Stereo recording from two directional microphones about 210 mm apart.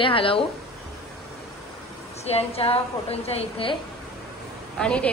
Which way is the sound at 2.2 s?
30° left (ahead or behind).